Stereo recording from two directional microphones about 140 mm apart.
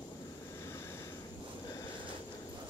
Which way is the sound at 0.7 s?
20° left (ahead or behind).